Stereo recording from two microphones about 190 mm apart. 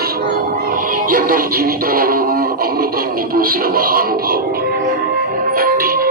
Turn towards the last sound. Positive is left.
turn(degrees=-50)  # may be behind; listen again after turning